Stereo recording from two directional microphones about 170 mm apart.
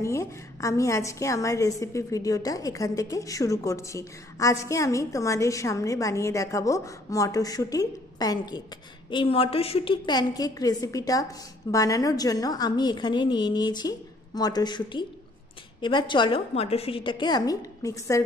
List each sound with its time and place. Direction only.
0.0 s a woman's voice: 15° left (ahead or behind)